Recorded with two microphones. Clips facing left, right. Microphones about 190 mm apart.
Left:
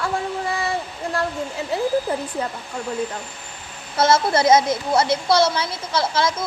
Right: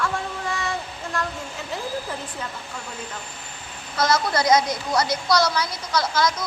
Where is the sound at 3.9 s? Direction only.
25° left (ahead or behind).